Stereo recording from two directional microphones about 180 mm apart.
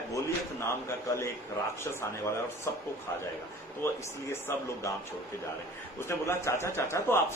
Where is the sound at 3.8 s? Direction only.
15° left (ahead or behind).